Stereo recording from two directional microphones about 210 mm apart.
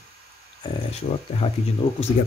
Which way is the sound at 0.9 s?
30° left (ahead or behind).